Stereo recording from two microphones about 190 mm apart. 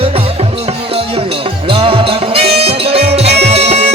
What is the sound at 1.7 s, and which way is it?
Music, 30° right (ahead or behind).